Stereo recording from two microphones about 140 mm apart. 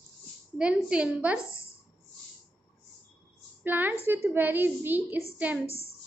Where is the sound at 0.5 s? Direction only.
5° right (ahead or behind).